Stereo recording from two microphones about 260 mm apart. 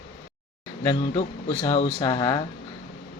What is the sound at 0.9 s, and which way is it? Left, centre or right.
Speech, centre.